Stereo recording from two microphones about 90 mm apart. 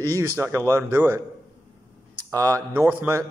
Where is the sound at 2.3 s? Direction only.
35° right (ahead or behind).